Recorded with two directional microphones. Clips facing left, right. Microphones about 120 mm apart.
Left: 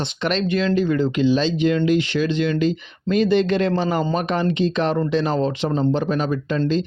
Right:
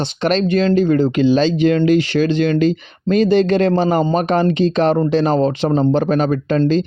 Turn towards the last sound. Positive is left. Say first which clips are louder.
# right 6 dB
turn(degrees=-55)  # may be behind; listen again after turning